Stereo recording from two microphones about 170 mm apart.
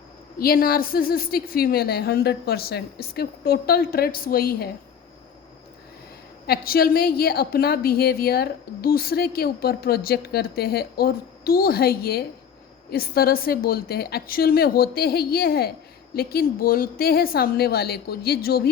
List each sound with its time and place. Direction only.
0.3 s a woman's voice: 60° left (ahead or behind)
6.5 s a woman's voice: 65° left (ahead or behind)